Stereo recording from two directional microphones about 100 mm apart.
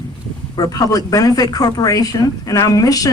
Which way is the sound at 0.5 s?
40° left (ahead or behind).